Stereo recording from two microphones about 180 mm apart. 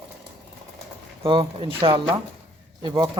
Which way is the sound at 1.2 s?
30° right (ahead or behind).